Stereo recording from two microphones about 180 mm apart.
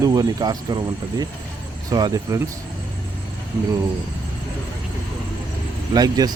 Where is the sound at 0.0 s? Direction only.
20° right (ahead or behind).